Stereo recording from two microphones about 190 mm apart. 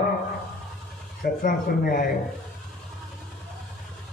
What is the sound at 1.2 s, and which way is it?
Speech, 50° left (ahead or behind).